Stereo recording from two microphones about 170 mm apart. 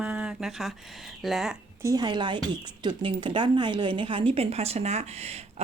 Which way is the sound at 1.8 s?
20° right (ahead or behind).